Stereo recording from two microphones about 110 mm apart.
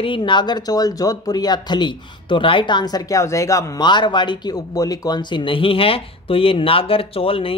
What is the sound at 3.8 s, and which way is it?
Speech, 45° left (ahead or behind).